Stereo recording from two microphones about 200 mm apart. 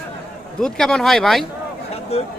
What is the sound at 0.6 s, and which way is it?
Speech, 5° left (ahead or behind).